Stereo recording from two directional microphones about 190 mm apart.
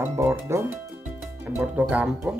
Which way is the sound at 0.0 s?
15° right (ahead or behind).